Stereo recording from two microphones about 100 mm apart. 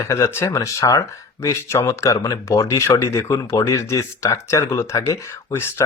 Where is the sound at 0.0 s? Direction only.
30° left (ahead or behind).